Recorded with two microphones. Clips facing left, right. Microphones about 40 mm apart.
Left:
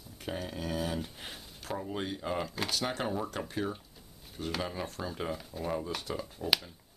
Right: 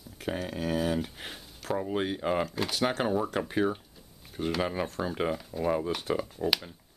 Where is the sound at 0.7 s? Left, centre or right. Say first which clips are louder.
Right 6 dB; centre.